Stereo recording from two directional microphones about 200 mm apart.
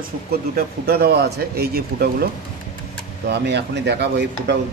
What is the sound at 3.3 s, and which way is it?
Speech, 60° right (ahead or behind).